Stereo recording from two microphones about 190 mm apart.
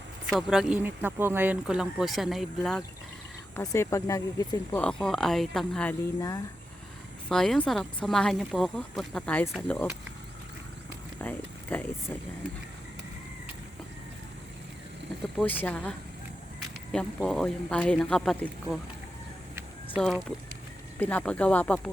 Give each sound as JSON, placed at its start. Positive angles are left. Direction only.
{"t": 0.3, "sound": "speech", "side_deg": 0}
{"t": 3.5, "sound": "speech", "side_deg": 15}
{"t": 4.8, "sound": "speech", "side_deg": 5}
{"t": 6.1, "sound": "speech", "side_deg": 20}
{"t": 7.3, "sound": "speech", "side_deg": 0}
{"t": 11.2, "sound": "speech", "side_deg": 10}
{"t": 15.2, "sound": "speech", "side_deg": 5}
{"t": 20.0, "sound": "speech", "side_deg": 0}